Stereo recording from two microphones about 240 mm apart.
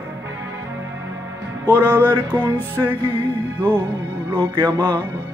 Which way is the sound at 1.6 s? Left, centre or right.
Centre.